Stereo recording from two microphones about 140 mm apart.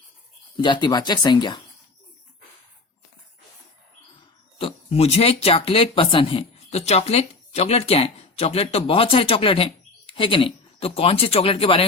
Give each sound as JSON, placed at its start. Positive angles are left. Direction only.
{"t": 0.5, "sound": "speech", "side_deg": 35}
{"t": 4.5, "sound": "speech", "side_deg": 40}